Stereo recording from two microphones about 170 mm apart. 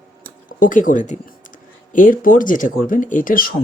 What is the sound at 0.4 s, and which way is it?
Speech, 55° left (ahead or behind).